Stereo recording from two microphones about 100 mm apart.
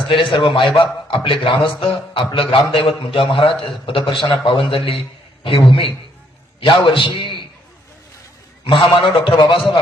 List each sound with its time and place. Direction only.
0.1 s a man's voice: 55° left (ahead or behind)
8.6 s a man's voice: 60° left (ahead or behind)